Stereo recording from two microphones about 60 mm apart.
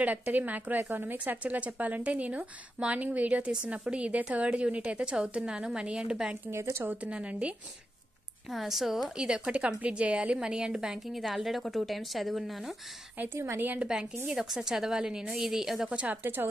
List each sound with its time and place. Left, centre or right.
0.0 s a woman's voice: right
6.5 s speech: right
6.8 s a woman's voice: right
7.1 s speech: centre
8.5 s speech: centre
9.1 s a woman's voice: centre
13.3 s speech: right
13.7 s a woman's voice: centre
15.9 s speech: centre
16.2 s a woman's voice: right